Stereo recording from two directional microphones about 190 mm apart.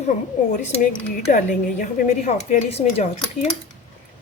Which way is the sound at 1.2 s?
45° left (ahead or behind).